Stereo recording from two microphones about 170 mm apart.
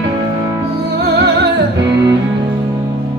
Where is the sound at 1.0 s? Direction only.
75° right (ahead or behind).